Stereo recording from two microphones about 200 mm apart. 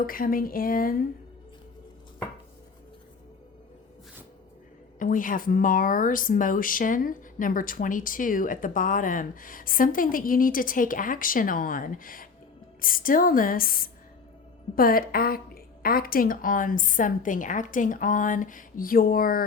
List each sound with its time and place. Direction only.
0.0 s speech: 45° left (ahead or behind)
4.9 s speech: 40° left (ahead or behind)